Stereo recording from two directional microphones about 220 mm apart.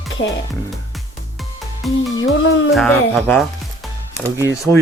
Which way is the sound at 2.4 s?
60° left (ahead or behind).